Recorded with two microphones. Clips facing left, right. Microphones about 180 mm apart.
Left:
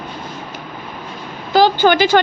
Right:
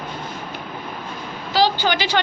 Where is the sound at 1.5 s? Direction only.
50° left (ahead or behind).